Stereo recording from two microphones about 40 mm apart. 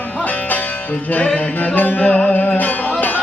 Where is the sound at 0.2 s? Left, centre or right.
Left.